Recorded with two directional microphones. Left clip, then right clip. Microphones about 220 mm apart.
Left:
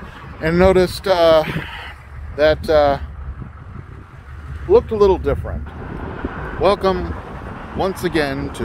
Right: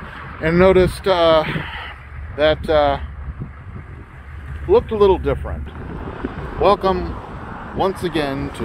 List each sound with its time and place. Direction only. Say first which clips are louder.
0.4 s speech: even; 15° left (ahead or behind)
4.6 s speech: left 1 dB; 15° left (ahead or behind)
6.6 s speech: right 1 dB; 5° left (ahead or behind)